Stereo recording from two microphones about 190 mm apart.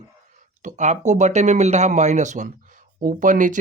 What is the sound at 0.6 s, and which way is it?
Speech, 40° right (ahead or behind).